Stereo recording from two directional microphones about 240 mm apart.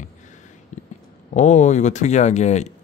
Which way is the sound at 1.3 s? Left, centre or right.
Left.